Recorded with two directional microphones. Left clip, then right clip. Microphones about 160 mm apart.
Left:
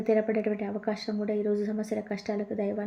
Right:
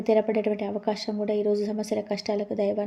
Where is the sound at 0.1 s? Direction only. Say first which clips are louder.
Right 4 dB; 35° right (ahead or behind).